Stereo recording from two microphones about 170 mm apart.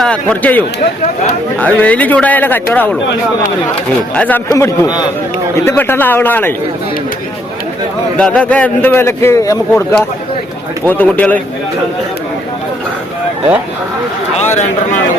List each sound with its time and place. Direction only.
0.0 s a man's voice: 5° left (ahead or behind)
4.1 s a man's voice: 5° left (ahead or behind)
4.5 s a man's voice: 15° left (ahead or behind)
8.2 s a man's voice: 5° left (ahead or behind)
10.8 s a man's voice: 10° left (ahead or behind)